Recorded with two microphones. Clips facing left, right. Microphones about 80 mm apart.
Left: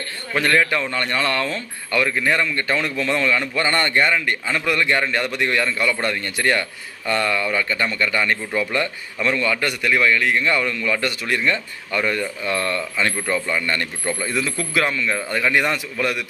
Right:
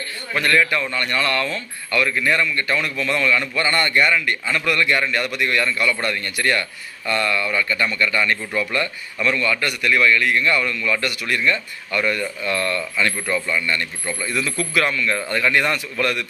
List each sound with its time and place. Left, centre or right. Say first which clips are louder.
0.3 s speech: even; left